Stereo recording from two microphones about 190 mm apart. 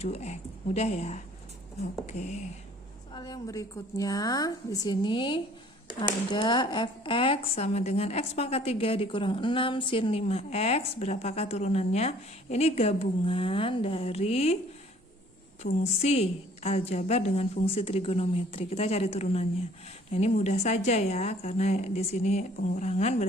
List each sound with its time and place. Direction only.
0.0 s speech: 35° left (ahead or behind)
3.1 s a woman's voice: 20° left (ahead or behind)
15.6 s speech: 35° left (ahead or behind)